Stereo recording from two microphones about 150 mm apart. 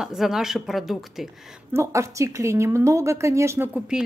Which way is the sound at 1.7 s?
20° right (ahead or behind).